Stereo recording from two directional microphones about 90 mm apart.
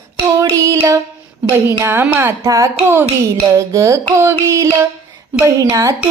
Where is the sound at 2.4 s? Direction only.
35° right (ahead or behind).